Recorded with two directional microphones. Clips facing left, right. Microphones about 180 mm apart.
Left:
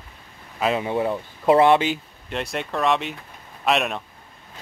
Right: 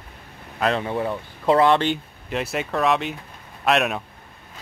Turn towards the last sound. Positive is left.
turn(degrees=0)  # may be behind; listen again after turning